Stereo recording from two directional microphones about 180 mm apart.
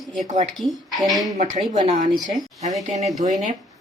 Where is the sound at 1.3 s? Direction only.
45° right (ahead or behind).